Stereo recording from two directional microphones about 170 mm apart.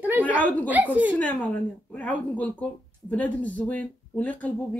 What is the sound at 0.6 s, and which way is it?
Speech, 10° right (ahead or behind).